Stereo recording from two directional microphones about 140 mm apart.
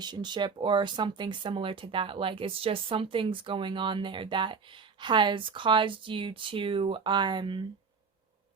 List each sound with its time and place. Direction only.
0.0 s speech: 30° right (ahead or behind)